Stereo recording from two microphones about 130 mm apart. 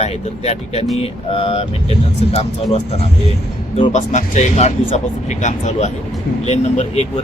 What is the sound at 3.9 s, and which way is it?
Speech, 65° left (ahead or behind).